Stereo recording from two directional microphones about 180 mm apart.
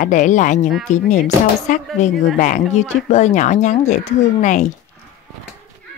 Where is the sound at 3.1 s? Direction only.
40° left (ahead or behind).